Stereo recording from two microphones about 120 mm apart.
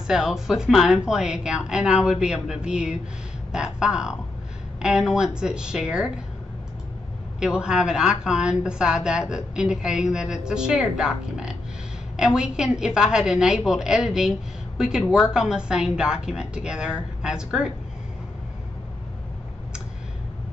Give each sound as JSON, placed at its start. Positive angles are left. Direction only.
{"t": 0.0, "sound": "speech", "side_deg": -5}
{"t": 7.3, "sound": "speech", "side_deg": -5}